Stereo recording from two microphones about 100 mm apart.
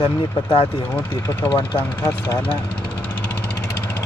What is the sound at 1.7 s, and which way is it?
Speech, 20° left (ahead or behind).